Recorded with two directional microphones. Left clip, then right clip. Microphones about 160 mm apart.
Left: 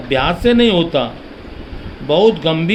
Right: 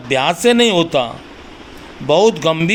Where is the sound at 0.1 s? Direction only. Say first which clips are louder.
Right 1 dB; 20° right (ahead or behind).